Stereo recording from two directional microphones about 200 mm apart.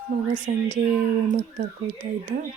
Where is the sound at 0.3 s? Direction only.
40° right (ahead or behind).